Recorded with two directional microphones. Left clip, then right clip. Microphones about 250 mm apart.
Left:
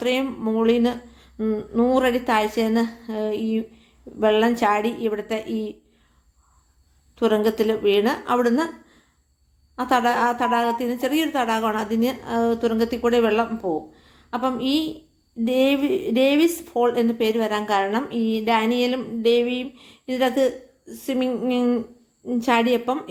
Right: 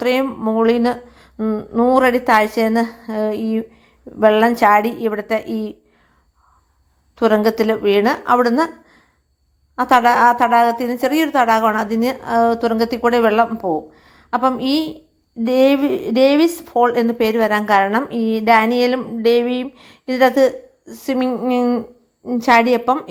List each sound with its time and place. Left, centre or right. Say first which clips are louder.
0.0 s a woman's voice: right 6 dB; right
7.2 s a woman's voice: right 5 dB; right